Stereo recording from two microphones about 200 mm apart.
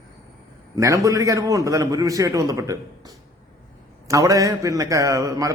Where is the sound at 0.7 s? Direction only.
15° right (ahead or behind).